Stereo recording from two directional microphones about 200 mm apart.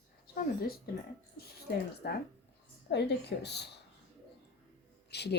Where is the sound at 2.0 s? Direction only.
55° left (ahead or behind).